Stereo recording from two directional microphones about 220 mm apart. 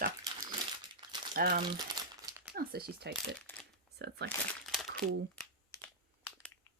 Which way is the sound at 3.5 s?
10° left (ahead or behind).